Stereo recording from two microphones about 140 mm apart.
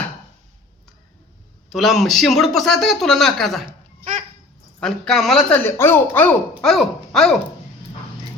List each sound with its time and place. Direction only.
1.7 s speech: centre (ahead or behind)
3.7 s a sound: 60° right (ahead or behind)
4.8 s speech: 5° left (ahead or behind)
6.6 s speech: centre (ahead or behind)